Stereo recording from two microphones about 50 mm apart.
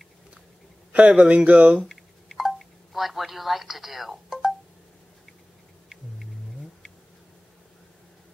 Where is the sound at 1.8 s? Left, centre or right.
Centre.